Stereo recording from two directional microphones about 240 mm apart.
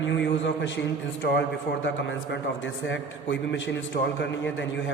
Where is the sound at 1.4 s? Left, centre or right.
Left.